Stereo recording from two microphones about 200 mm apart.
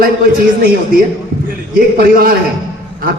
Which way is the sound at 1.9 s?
50° right (ahead or behind).